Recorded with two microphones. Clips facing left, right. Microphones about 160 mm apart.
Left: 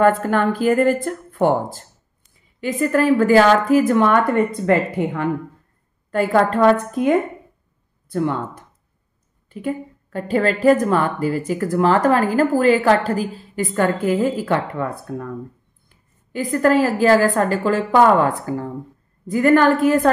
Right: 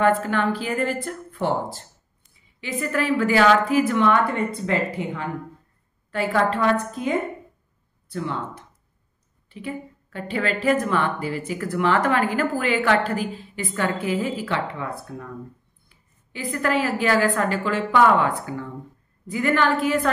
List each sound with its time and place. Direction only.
0.0 s a woman's voice: 45° left (ahead or behind)